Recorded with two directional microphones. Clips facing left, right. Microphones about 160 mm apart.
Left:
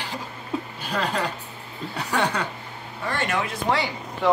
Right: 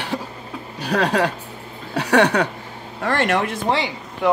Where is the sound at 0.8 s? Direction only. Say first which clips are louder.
Right 9 dB; 75° right (ahead or behind).